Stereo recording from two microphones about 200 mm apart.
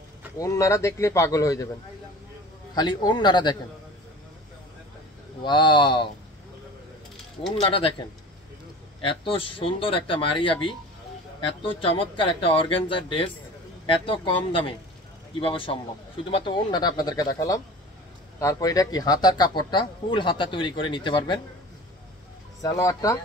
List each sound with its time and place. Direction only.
0.4 s speech: 15° left (ahead or behind)
2.7 s speech: 20° left (ahead or behind)
5.4 s speech: 25° left (ahead or behind)
9.0 s speech: 25° left (ahead or behind)
22.6 s speech: 15° left (ahead or behind)